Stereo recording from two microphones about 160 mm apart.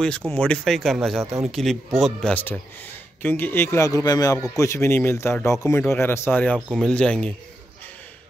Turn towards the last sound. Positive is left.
turn(degrees=5)  # may be behind; listen again after turning